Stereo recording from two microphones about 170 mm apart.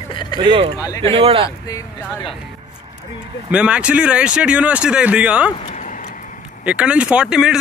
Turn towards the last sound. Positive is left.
turn(degrees=-5)  # may be behind; listen again after turning